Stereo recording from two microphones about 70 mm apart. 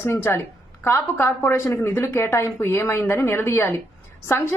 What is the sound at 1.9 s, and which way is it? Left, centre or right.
A woman's voice, left.